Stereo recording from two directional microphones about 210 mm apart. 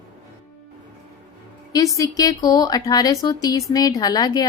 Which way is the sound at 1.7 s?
15° left (ahead or behind).